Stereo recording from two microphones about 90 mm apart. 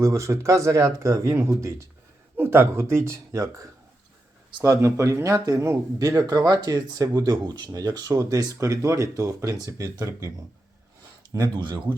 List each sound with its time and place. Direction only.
0.0 s speech: 35° right (ahead or behind)
11.5 s speech: 55° right (ahead or behind)